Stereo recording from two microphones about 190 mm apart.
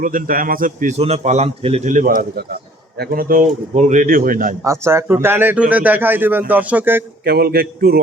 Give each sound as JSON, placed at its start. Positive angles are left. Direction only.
{"t": 0.0, "sound": "a man's voice", "side_deg": -45}
{"t": 4.6, "sound": "speech", "side_deg": -15}
{"t": 7.3, "sound": "a man's voice", "side_deg": -55}